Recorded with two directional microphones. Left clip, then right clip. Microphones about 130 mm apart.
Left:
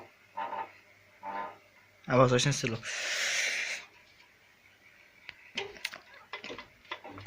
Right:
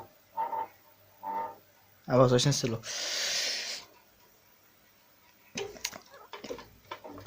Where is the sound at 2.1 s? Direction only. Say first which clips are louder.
Right 1 dB; 20° right (ahead or behind).